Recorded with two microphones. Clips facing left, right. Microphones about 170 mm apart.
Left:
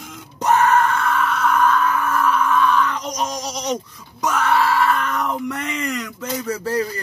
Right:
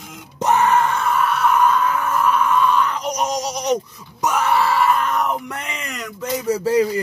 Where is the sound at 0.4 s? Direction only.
20° right (ahead or behind).